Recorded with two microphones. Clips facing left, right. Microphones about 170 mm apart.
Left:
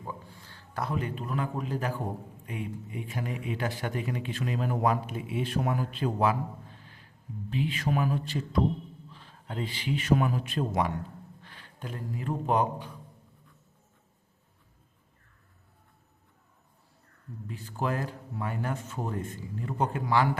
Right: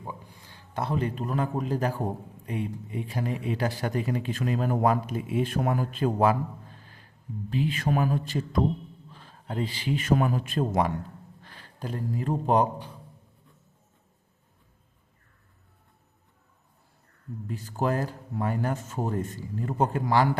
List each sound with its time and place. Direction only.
0.0 s a man's voice: 15° right (ahead or behind); by 12.6 s 35° right (ahead or behind)
17.5 s a man's voice: 40° right (ahead or behind)